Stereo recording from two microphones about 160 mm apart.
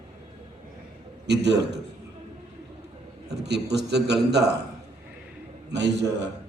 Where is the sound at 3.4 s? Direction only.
90° right.